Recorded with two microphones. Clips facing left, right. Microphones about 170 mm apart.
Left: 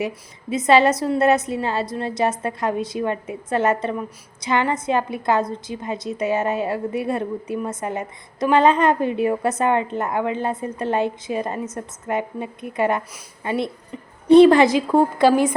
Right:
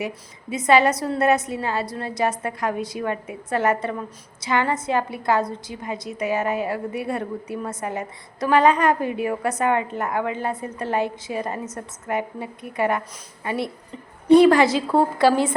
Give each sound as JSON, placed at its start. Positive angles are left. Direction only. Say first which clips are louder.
{"t": 0.7, "sound": "a woman's voice", "louder": "left 2 dB", "side_deg": 20}